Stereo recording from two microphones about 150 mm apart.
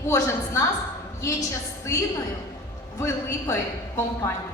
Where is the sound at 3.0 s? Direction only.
20° left (ahead or behind).